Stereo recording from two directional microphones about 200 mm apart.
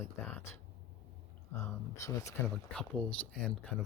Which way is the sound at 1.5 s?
15° left (ahead or behind).